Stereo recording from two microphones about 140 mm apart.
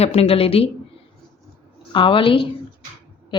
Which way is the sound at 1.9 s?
35° left (ahead or behind).